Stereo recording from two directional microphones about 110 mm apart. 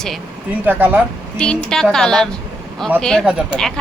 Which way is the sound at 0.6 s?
15° right (ahead or behind).